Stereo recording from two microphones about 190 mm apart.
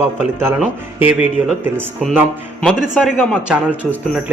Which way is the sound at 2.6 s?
5° left (ahead or behind).